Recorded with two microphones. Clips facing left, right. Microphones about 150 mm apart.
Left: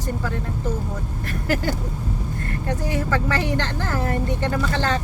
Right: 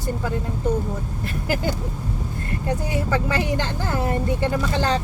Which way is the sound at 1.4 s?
15° right (ahead or behind).